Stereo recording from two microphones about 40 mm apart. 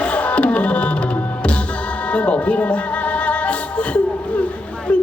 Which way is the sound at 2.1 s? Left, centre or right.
Left.